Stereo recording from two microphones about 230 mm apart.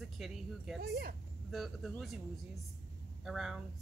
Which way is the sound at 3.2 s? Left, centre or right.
Centre.